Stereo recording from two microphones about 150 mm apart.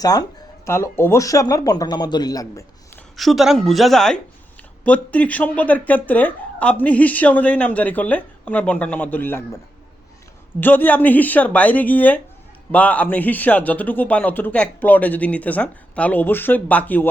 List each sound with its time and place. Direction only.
0.0 s speech: 25° left (ahead or behind)
3.2 s speech: centre (ahead or behind); by 9.6 s 15° left (ahead or behind)
10.6 s speech: 10° left (ahead or behind)